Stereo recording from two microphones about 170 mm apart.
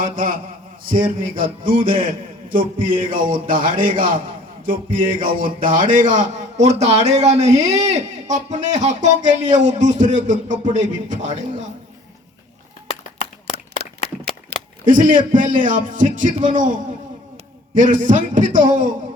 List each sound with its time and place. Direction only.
0.0 s a man's voice: 55° right (ahead or behind)
12.9 s a sound: 35° left (ahead or behind)
14.8 s a man's voice: 50° right (ahead or behind)
17.9 s a man's voice: 50° right (ahead or behind)